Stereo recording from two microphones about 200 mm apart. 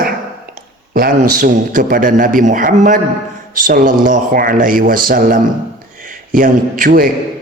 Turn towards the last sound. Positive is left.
turn(degrees=-45)  # may be behind; listen again after turning